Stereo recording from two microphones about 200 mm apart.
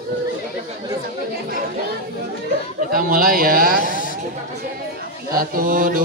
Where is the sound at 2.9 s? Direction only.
45° right (ahead or behind).